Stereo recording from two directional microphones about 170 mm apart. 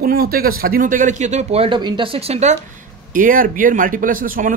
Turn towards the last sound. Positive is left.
turn(degrees=-55)  # may be behind; listen again after turning